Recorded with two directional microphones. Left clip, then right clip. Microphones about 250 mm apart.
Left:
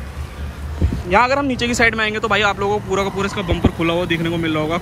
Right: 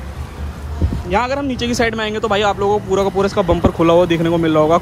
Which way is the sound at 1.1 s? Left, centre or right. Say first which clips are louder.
Left 3 dB; centre.